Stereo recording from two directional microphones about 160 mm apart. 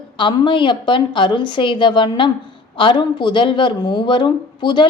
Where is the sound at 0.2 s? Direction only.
30° left (ahead or behind).